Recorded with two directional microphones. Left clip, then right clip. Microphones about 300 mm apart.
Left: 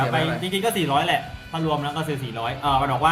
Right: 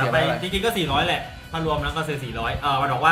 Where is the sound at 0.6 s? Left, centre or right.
Left.